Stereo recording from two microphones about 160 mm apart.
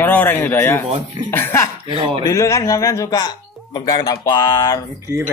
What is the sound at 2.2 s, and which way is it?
Speech, 20° left (ahead or behind).